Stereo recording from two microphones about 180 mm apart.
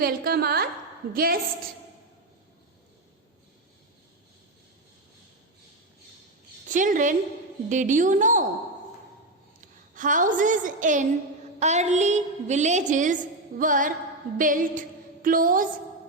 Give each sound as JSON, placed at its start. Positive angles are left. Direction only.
{"t": 0.0, "sound": "a woman's voice", "side_deg": -60}
{"t": 6.7, "sound": "a woman's voice", "side_deg": -45}
{"t": 9.9, "sound": "a woman's voice", "side_deg": -45}
{"t": 14.3, "sound": "a sound", "side_deg": -50}